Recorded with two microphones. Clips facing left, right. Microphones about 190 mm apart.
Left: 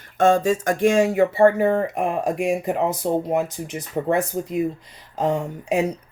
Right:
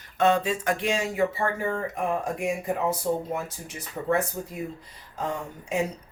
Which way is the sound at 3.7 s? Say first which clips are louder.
Left 2 dB; 80° left.